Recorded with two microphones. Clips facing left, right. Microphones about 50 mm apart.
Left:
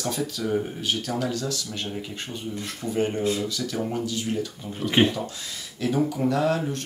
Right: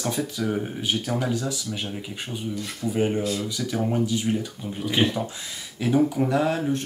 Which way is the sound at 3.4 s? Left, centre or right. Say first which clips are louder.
Right 2 dB; centre.